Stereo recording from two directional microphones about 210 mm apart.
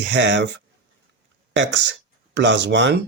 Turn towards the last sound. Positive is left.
turn(degrees=-55)  # may be behind; listen again after turning